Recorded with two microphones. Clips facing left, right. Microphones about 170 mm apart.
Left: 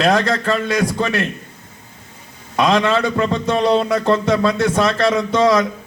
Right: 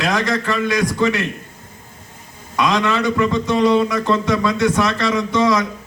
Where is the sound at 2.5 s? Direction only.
55° left (ahead or behind).